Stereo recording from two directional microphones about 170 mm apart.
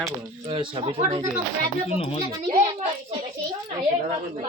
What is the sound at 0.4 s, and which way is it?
Speech, 30° right (ahead or behind).